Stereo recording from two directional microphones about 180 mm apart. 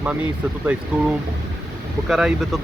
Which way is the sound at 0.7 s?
5° right (ahead or behind).